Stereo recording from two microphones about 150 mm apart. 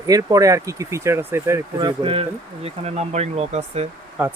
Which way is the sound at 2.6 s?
45° right (ahead or behind).